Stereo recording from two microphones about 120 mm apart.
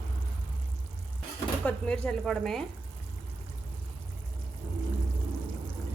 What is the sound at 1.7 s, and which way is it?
Speech, 10° left (ahead or behind).